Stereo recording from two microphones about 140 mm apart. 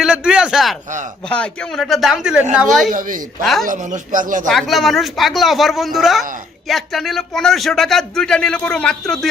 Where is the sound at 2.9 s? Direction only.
70° right (ahead or behind).